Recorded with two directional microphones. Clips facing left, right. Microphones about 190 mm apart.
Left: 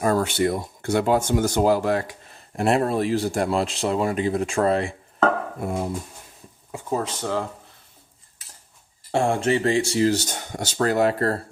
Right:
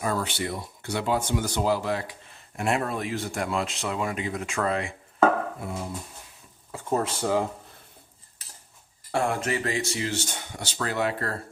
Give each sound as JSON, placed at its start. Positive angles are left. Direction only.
{"t": 0.0, "sound": "speech", "side_deg": 45}
{"t": 2.6, "sound": "speech", "side_deg": 35}
{"t": 5.5, "sound": "speech", "side_deg": 50}
{"t": 6.9, "sound": "speech", "side_deg": -10}
{"t": 9.1, "sound": "speech", "side_deg": 25}